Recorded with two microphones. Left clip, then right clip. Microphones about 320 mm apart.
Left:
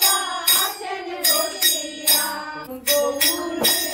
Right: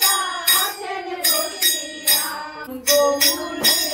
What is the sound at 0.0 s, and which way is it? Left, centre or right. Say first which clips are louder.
Music: right 1 dB; centre.